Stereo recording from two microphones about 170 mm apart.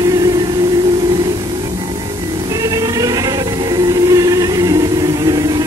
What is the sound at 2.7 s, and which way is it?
Music, 20° right (ahead or behind).